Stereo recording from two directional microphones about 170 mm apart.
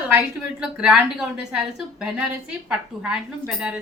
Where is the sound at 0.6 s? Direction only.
5° right (ahead or behind).